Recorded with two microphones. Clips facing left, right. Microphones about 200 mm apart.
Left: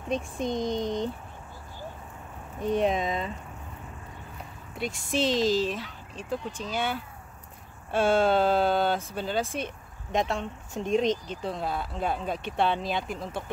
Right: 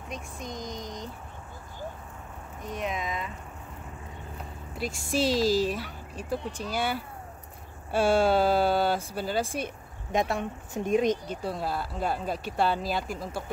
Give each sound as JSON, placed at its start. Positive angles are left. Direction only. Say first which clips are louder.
{"t": 0.1, "sound": "speech", "louder": "left 10 dB", "side_deg": 25}
{"t": 2.6, "sound": "speech", "louder": "left 8 dB", "side_deg": 30}
{"t": 4.7, "sound": "speech", "louder": "even", "side_deg": -5}
{"t": 7.9, "sound": "speech", "louder": "even", "side_deg": -10}